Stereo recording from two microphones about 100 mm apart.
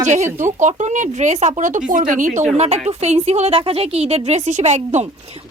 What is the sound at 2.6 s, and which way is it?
A woman's voice, 90° right.